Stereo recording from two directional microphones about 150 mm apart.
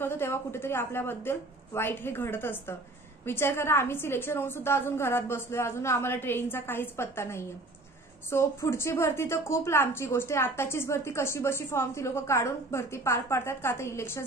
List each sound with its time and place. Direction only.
0.0 s a woman's voice: 15° left (ahead or behind)